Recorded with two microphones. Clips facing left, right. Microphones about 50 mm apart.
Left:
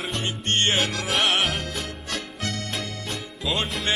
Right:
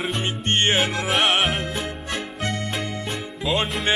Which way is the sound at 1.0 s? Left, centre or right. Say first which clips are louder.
Right 3 dB; centre.